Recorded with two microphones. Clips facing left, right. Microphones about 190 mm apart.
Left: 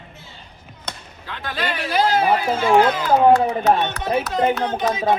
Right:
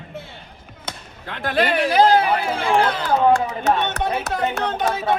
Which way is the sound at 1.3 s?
55° right (ahead or behind).